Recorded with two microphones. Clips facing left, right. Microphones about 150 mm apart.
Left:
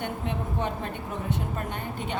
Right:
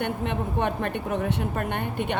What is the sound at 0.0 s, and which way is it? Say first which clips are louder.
A woman's voice: right 4 dB; 70° right (ahead or behind).